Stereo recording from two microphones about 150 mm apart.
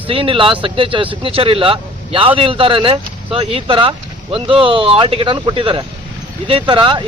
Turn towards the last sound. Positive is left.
turn(degrees=-30)  # may be behind; listen again after turning